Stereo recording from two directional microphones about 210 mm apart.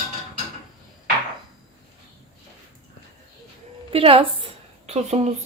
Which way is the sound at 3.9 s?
25° right (ahead or behind).